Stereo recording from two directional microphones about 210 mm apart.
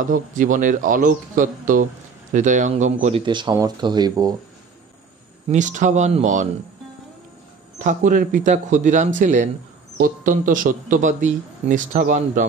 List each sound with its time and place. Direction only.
0.0 s a man's voice: 40° right (ahead or behind); by 4.4 s 20° right (ahead or behind)
5.5 s a man's voice: 35° right (ahead or behind)
7.8 s a man's voice: 40° right (ahead or behind)